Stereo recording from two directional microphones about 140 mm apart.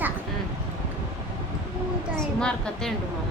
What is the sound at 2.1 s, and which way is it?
Speech, 5° left (ahead or behind).